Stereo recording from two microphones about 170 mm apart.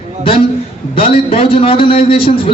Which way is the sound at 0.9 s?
35° left (ahead or behind).